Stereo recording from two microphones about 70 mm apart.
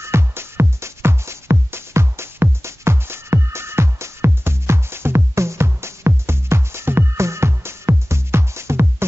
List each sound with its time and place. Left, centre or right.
0.0 s music: right